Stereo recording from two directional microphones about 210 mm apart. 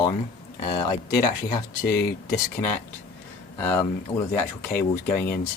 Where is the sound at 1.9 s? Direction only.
50° left (ahead or behind).